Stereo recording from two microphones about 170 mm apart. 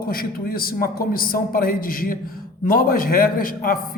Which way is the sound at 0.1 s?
60° left (ahead or behind).